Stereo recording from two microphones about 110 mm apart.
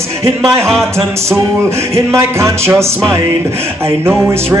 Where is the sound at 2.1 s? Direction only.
25° right (ahead or behind).